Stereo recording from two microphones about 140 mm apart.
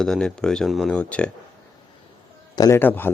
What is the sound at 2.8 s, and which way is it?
Speech, 15° left (ahead or behind).